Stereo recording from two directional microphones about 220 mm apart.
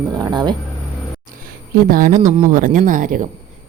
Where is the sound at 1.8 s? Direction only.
40° right (ahead or behind).